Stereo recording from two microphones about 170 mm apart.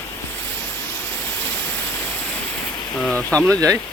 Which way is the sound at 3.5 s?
20° right (ahead or behind).